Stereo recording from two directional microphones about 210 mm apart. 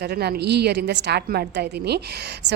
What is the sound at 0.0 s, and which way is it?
A woman's voice, 50° right (ahead or behind).